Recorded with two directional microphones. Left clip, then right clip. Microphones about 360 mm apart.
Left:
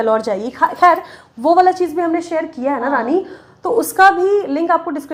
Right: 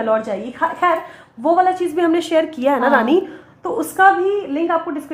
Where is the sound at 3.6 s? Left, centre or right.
Centre.